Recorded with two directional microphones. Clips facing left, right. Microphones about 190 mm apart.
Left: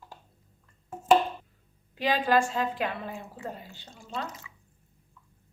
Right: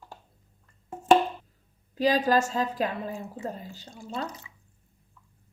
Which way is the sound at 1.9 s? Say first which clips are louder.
Right 2 dB; 40° right (ahead or behind).